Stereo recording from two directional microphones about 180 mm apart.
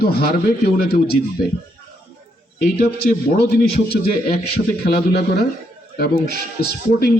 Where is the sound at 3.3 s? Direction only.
60° left (ahead or behind).